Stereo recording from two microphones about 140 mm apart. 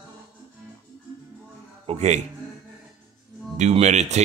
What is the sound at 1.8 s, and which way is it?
Speech, 55° right (ahead or behind).